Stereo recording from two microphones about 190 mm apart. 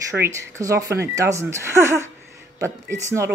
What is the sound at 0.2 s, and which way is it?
Speech, 15° right (ahead or behind).